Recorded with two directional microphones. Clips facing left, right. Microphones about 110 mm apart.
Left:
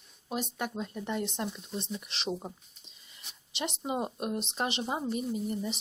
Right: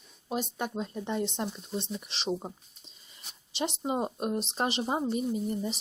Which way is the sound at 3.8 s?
30° right (ahead or behind).